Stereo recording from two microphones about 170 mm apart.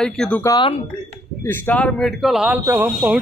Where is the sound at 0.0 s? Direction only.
5° left (ahead or behind).